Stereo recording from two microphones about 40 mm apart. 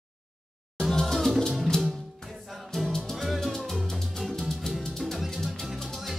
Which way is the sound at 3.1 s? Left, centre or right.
Centre.